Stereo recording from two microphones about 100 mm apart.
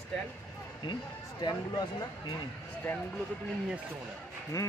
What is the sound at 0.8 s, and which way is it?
Speech, 45° left (ahead or behind).